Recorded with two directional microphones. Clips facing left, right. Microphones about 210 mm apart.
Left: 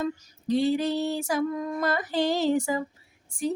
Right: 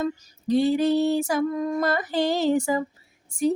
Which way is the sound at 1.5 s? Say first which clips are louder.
Right 4 dB; 40° right (ahead or behind).